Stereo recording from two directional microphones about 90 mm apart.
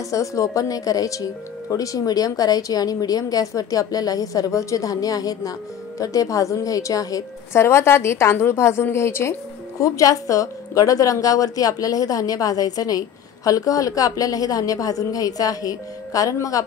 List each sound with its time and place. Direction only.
0.1 s a woman's voice: 35° left (ahead or behind)
7.6 s a woman's voice: 30° left (ahead or behind)